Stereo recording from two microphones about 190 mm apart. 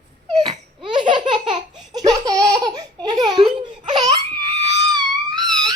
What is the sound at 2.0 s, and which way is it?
Laughter, 20° right (ahead or behind).